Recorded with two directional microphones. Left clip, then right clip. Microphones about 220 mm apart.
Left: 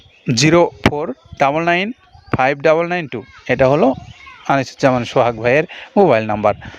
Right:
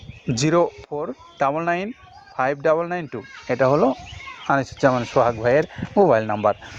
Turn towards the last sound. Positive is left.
turn(degrees=50)  # may be behind; listen again after turning